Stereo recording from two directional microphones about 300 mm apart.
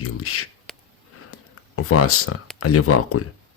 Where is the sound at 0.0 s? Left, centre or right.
Left.